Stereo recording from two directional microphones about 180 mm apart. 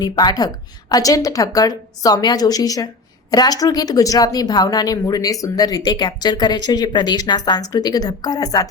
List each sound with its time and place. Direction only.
0.0 s speech: 20° left (ahead or behind)